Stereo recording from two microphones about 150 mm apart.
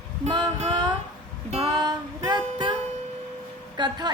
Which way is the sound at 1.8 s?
25° right (ahead or behind).